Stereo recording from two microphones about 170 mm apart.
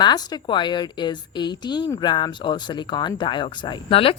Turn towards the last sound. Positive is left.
turn(degrees=30)  # may be behind; listen again after turning